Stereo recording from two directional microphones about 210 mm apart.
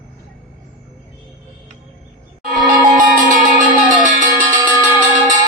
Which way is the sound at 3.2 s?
40° right (ahead or behind).